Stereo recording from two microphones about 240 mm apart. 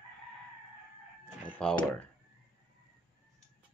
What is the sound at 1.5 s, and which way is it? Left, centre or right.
Speech, centre.